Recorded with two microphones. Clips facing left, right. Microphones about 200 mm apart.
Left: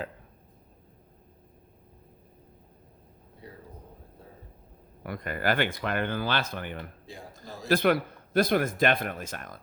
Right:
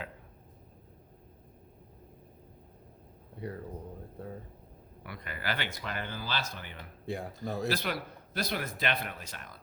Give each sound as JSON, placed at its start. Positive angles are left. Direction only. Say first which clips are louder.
{"t": 5.0, "sound": "speech", "louder": "left 9 dB", "side_deg": 45}
{"t": 7.0, "sound": "a man's voice", "louder": "right 8 dB", "side_deg": -60}
{"t": 7.7, "sound": "speech", "louder": "left 10 dB", "side_deg": 55}